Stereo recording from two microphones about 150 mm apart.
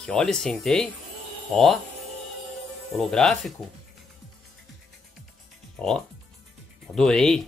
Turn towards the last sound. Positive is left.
turn(degrees=5)  # may be behind; listen again after turning